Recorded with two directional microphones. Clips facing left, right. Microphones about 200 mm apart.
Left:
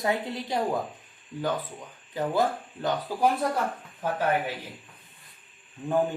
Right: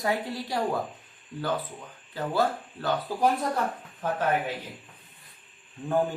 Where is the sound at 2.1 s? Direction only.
20° left (ahead or behind).